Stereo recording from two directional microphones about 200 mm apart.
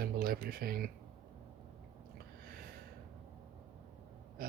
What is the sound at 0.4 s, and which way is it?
Speech, 50° right (ahead or behind).